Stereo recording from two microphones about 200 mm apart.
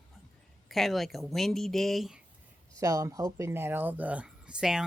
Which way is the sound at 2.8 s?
15° right (ahead or behind).